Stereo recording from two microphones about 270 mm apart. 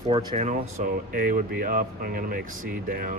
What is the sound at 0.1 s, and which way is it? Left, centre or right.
Speech, right.